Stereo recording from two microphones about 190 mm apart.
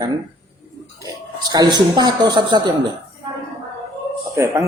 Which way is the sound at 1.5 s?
20° right (ahead or behind).